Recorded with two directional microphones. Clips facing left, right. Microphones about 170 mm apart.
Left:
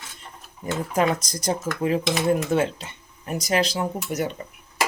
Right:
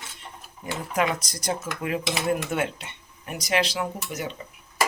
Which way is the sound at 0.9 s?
40° left (ahead or behind).